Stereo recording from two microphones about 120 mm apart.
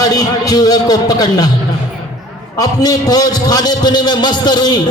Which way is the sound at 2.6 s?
30° left (ahead or behind).